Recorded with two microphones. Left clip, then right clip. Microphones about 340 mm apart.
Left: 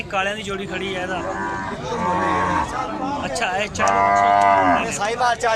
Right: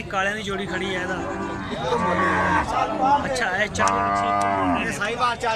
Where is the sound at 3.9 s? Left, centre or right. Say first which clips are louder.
Left 6 dB; left.